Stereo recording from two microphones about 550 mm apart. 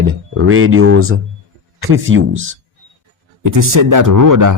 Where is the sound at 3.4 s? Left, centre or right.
Right.